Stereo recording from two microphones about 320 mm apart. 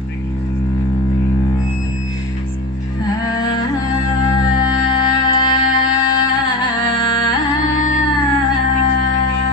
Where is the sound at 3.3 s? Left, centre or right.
Centre.